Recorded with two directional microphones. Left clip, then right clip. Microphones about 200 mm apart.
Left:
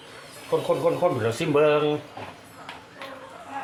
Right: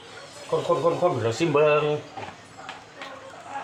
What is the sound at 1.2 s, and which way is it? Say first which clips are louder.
Speech: even; 20° left (ahead or behind).